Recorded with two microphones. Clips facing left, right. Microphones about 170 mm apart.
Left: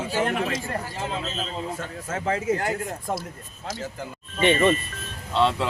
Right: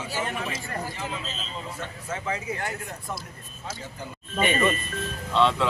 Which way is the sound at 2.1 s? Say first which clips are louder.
Left 7 dB; 45° left (ahead or behind).